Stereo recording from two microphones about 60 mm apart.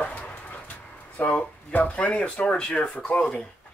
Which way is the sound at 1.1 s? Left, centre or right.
Left.